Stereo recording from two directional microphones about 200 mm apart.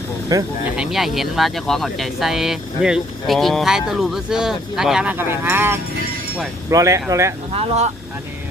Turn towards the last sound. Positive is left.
turn(degrees=-30)  # may be behind; listen again after turning